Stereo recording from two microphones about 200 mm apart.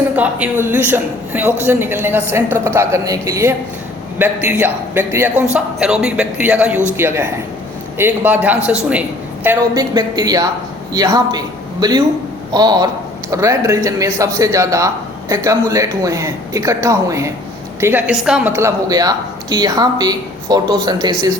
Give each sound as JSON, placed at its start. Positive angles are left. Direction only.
{"t": 0.2, "sound": "a woman's voice", "side_deg": -10}